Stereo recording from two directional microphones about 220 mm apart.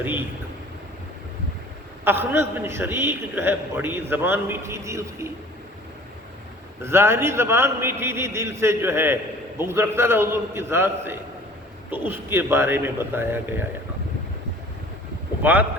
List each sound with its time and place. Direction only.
0.0 s a man's voice: 10° right (ahead or behind)
2.0 s a man's voice: 10° right (ahead or behind)
6.8 s a man's voice: 10° right (ahead or behind)
15.4 s a man's voice: 10° right (ahead or behind)